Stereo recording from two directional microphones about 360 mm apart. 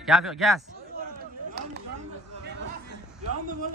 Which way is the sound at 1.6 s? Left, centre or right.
Right.